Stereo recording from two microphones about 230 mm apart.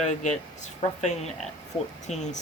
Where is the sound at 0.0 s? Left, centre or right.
Left.